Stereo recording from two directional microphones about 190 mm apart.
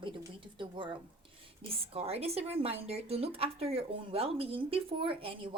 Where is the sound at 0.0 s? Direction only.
25° right (ahead or behind).